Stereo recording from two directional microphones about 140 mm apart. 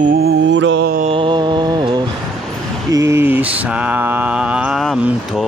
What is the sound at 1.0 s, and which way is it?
Music, 35° right (ahead or behind).